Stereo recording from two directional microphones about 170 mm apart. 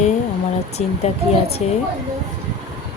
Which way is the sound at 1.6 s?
40° left (ahead or behind).